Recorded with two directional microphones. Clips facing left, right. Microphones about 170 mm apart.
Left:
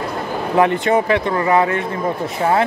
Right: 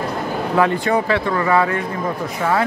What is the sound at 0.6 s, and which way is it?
Speech, 20° left (ahead or behind).